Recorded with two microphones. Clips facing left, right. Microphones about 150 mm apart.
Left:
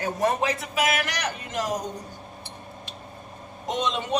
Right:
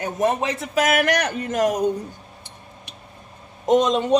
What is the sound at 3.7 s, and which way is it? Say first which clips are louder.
Speech: right 10 dB; 45° right (ahead or behind).